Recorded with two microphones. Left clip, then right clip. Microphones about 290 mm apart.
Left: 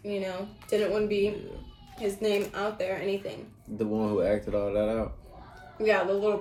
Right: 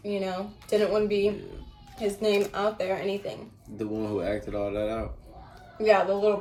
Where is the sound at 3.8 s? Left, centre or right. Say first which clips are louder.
Left 3 dB; centre.